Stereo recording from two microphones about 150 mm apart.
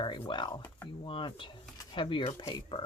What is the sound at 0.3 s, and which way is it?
Speech, 30° left (ahead or behind).